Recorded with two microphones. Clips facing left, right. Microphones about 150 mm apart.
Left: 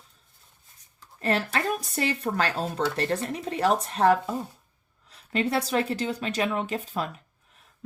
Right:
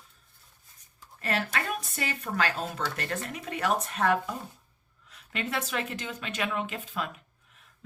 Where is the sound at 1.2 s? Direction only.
30° left (ahead or behind).